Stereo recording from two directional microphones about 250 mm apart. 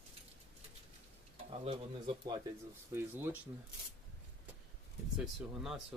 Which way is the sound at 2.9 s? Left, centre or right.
Centre.